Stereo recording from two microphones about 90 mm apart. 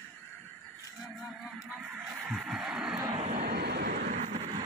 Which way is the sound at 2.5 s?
5° right (ahead or behind).